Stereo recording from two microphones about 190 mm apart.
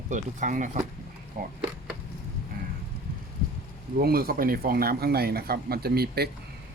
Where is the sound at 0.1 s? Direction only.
40° right (ahead or behind).